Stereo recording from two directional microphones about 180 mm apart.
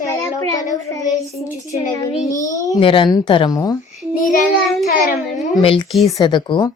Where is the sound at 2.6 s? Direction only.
25° left (ahead or behind).